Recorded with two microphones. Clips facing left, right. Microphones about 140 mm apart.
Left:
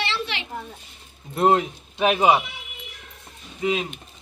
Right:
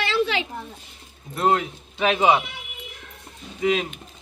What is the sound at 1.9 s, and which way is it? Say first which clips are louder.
Speech: left 1 dB; 10° left (ahead or behind).